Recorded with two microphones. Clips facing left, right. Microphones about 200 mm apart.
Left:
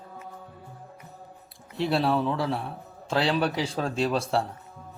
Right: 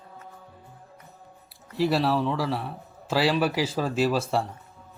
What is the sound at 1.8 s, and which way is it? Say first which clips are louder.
A man's voice: right 1 dB; centre (ahead or behind).